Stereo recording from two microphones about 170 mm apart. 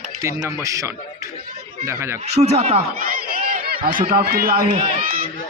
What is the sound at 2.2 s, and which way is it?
Speech, 40° right (ahead or behind).